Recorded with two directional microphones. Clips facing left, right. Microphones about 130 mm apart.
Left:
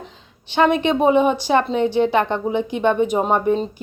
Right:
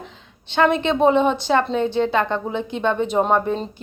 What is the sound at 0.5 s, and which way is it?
A woman's voice, 15° left (ahead or behind).